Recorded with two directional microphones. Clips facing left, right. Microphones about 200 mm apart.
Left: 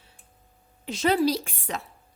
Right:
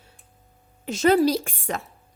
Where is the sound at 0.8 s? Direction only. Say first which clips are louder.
Right 4 dB; 45° right (ahead or behind).